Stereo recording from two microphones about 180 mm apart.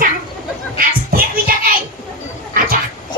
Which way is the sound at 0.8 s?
55° right (ahead or behind).